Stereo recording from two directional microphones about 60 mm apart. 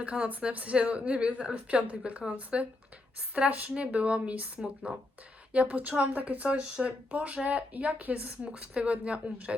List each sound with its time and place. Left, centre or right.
0.0 s a woman's voice: centre